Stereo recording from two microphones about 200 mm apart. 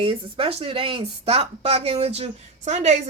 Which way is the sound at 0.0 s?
30° right (ahead or behind).